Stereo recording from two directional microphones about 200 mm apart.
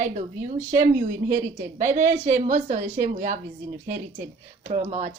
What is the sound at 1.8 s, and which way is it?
Speech, 40° right (ahead or behind).